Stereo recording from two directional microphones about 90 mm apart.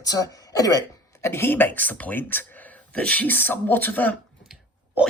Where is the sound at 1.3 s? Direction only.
25° left (ahead or behind).